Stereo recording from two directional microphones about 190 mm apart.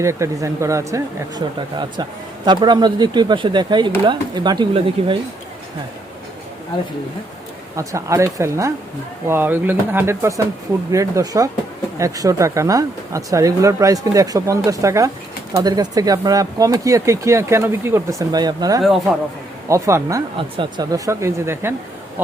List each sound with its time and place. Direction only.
0.0 s speech: 15° right (ahead or behind)
7.8 s speech: 15° right (ahead or behind)